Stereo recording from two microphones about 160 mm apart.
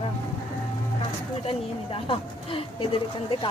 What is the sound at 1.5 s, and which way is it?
Speech, 35° left (ahead or behind).